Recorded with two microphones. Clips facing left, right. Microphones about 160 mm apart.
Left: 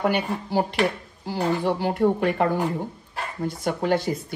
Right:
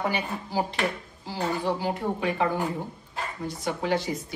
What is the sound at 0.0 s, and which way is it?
Speech, 65° left (ahead or behind).